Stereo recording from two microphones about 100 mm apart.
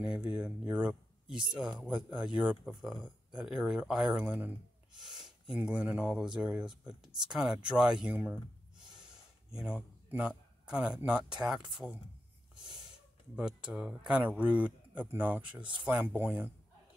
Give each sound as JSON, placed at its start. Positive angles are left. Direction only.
{"t": 0.0, "sound": "speech", "side_deg": -10}
{"t": 5.0, "sound": "a sound", "side_deg": -5}
{"t": 5.7, "sound": "speech", "side_deg": -10}
{"t": 13.4, "sound": "speech", "side_deg": -10}